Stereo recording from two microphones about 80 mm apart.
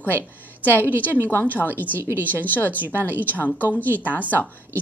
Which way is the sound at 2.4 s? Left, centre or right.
Left.